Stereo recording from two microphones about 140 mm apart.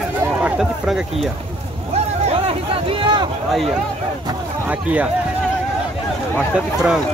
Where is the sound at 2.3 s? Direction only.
45° right (ahead or behind).